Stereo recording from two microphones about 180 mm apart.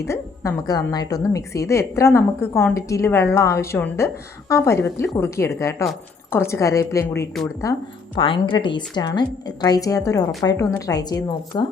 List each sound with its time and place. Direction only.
0.0 s a woman's voice: 15° left (ahead or behind)
8.1 s a woman's voice: 30° left (ahead or behind)